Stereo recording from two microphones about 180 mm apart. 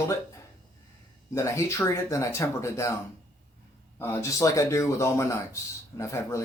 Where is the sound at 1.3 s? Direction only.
15° left (ahead or behind).